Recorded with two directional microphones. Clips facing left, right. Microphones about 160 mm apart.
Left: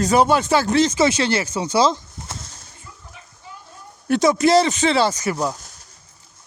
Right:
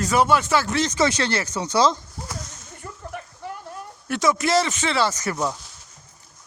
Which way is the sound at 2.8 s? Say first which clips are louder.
Right 12 dB; 65° right (ahead or behind).